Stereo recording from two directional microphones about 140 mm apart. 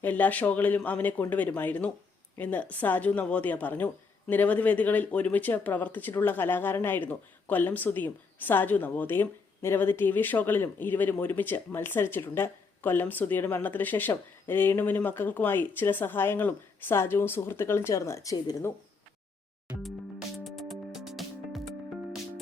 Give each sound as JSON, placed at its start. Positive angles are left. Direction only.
{"t": 0.0, "sound": "speech", "side_deg": 10}
{"t": 20.4, "sound": "music", "side_deg": 0}